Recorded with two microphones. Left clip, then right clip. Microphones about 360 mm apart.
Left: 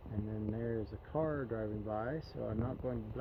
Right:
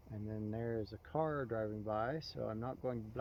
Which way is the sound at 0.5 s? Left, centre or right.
Centre.